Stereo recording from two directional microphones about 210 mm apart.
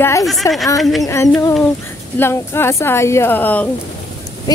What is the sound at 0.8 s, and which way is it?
Speech, centre (ahead or behind).